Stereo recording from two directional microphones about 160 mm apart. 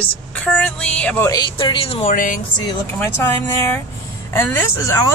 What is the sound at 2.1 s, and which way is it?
Speech, 55° left (ahead or behind).